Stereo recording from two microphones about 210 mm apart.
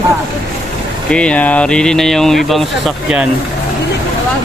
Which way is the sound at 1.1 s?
5° left (ahead or behind).